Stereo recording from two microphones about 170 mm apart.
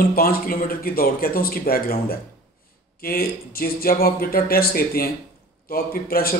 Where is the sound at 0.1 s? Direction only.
60° left (ahead or behind).